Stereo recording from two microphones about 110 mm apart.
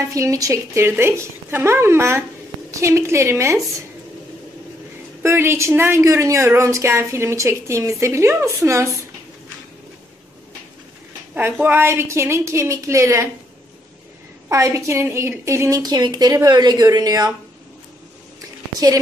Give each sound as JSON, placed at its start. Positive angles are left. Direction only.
{"t": 0.1, "sound": "a woman's voice", "side_deg": -30}
{"t": 5.2, "sound": "a woman's voice", "side_deg": -25}
{"t": 11.3, "sound": "a woman's voice", "side_deg": -20}
{"t": 14.5, "sound": "a woman's voice", "side_deg": -30}
{"t": 15.8, "sound": "a woman's voice", "side_deg": -40}